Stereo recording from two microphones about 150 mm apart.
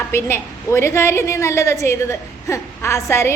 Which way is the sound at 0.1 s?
15° left (ahead or behind).